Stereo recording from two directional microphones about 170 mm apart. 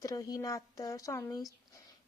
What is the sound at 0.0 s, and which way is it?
Speech, 20° left (ahead or behind).